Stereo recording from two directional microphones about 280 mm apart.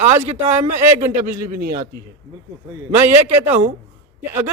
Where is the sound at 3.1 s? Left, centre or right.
Right.